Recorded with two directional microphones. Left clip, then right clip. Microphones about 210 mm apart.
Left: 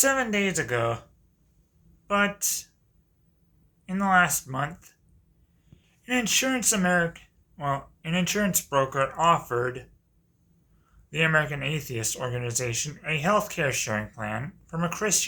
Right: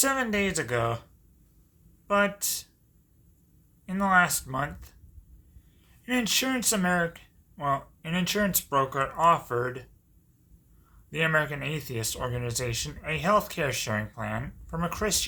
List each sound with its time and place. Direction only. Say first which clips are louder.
0.0 s speech: left 2 dB; 15° right (ahead or behind)
2.0 s speech: even; 15° right (ahead or behind)
3.8 s speech: left 1 dB; 15° right (ahead or behind)
6.1 s speech: left 2 dB; 15° right (ahead or behind)
11.1 s speech: left 2 dB; 15° right (ahead or behind)